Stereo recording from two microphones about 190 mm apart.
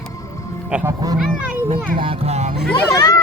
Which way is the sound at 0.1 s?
15° left (ahead or behind).